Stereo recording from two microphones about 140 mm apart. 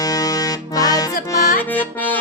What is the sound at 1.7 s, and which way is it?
Music, 10° left (ahead or behind).